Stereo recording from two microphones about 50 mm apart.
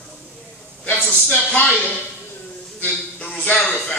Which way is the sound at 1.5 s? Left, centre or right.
Left.